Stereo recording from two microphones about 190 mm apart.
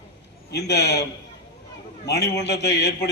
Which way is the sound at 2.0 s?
60° left (ahead or behind).